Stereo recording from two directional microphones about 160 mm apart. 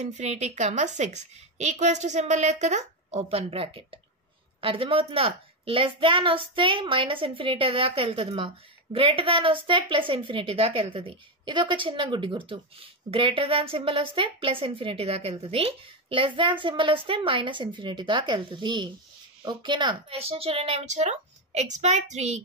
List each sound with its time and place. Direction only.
0.0 s a woman's voice: 45° right (ahead or behind)